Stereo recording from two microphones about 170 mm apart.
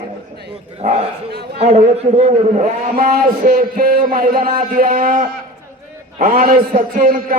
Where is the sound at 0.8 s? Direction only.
40° right (ahead or behind).